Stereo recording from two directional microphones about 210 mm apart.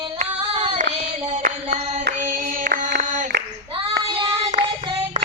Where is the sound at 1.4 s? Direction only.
45° right (ahead or behind).